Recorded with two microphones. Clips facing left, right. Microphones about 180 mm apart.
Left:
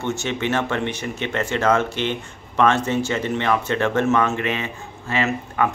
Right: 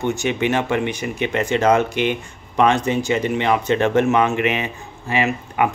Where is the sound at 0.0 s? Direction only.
15° right (ahead or behind).